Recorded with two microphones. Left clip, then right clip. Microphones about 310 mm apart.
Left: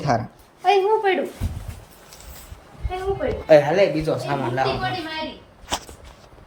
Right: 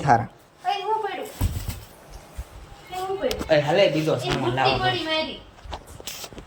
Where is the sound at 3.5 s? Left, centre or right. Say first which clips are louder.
Left 7 dB; left.